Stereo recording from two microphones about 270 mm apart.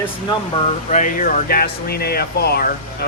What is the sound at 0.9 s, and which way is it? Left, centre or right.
Speech, left.